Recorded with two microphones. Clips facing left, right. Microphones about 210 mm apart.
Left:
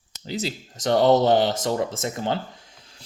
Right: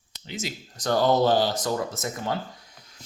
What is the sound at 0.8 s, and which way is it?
Speech, 20° left (ahead or behind).